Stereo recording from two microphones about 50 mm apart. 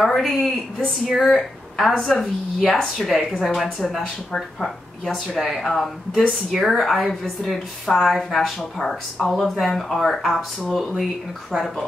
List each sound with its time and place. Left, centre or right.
0.0 s speech: centre
6.3 s speech: centre